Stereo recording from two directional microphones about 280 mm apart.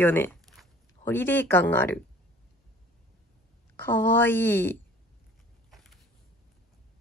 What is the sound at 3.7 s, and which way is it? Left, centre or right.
A woman's voice, centre.